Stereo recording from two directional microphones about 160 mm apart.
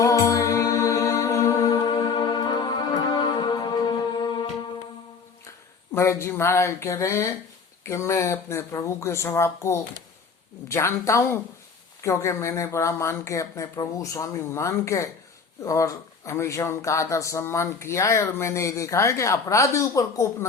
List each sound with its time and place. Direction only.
0.0 s music: 20° left (ahead or behind)
5.9 s speech: 15° left (ahead or behind)